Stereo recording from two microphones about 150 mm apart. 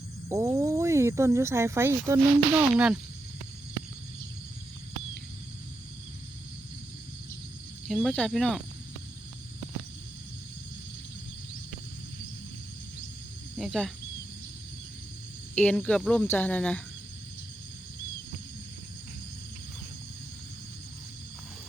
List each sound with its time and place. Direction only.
0.3 s speech: 20° right (ahead or behind)
2.7 s speech: 5° right (ahead or behind)
8.1 s speech: 5° left (ahead or behind)
13.6 s speech: centre (ahead or behind)
15.5 s speech: 5° left (ahead or behind)